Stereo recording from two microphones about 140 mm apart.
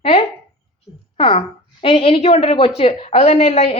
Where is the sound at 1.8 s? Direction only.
45° left (ahead or behind).